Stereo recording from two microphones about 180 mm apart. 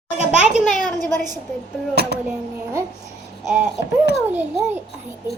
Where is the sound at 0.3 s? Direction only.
Centre (ahead or behind).